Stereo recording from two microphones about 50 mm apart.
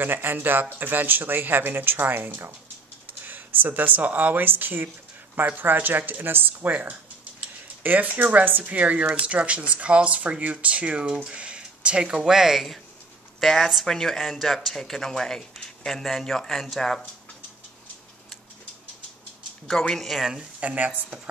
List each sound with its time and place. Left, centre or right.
0.0 s speech: right
4.5 s speech: right
7.6 s a sound: right
8.1 s speech: right; by 17.0 s centre
19.9 s speech: centre
20.2 s speech: centre
20.6 s speech: right